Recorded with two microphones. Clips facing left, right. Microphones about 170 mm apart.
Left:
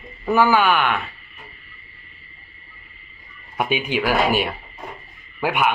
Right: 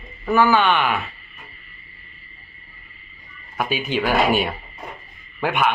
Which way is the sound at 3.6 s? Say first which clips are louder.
Left 1 dB; 20° left (ahead or behind).